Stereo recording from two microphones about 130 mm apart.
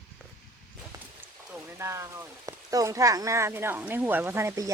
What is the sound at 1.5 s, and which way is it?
Speech, 20° right (ahead or behind).